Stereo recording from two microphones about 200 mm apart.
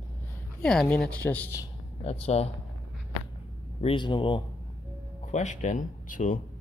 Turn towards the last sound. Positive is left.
turn(degrees=40)  # may be behind; listen again after turning